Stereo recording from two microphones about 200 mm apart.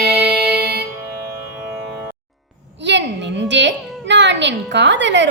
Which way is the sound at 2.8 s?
60° right (ahead or behind).